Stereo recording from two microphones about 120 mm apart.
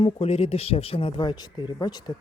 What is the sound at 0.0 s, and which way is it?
Speech, 55° left (ahead or behind).